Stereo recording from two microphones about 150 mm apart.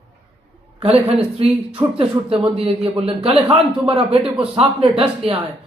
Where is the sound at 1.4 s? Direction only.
35° right (ahead or behind).